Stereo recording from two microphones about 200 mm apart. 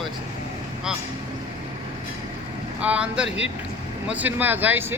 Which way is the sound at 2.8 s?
5° right (ahead or behind).